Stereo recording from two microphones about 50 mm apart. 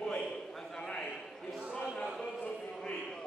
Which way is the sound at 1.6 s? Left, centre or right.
Centre.